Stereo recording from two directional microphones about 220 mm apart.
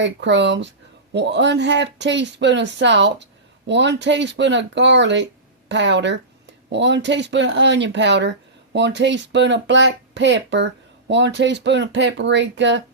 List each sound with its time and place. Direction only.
0.0 s speech: 55° right (ahead or behind)